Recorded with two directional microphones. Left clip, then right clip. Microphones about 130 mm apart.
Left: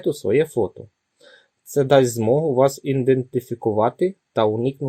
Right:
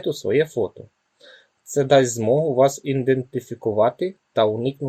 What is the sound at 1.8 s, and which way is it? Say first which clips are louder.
Speech: left 1 dB; 55° left (ahead or behind).